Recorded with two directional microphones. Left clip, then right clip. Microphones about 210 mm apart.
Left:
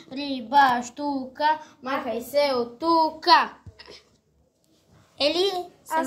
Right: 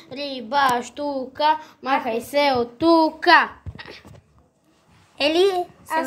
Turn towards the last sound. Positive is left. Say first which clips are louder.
# right 4 dB
turn(degrees=-30)  # may be behind; listen again after turning